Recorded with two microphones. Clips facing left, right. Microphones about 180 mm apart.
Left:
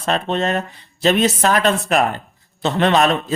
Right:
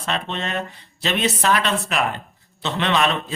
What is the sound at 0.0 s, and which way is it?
A man's voice, 45° left (ahead or behind).